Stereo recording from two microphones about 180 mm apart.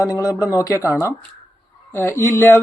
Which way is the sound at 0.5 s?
15° left (ahead or behind).